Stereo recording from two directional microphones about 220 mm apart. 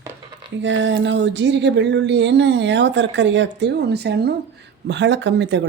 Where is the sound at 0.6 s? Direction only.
55° right (ahead or behind).